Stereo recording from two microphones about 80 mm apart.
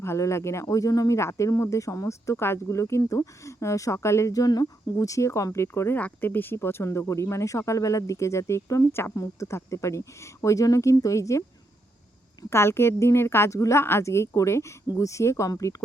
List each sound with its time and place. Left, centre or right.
0.0 s speech: left
6.0 s speech: left
12.5 s speech: left